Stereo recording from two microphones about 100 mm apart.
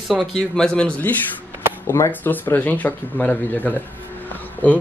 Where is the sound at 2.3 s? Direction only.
20° left (ahead or behind).